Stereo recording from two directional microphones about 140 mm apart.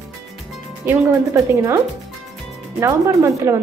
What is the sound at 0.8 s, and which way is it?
Speech, 20° right (ahead or behind).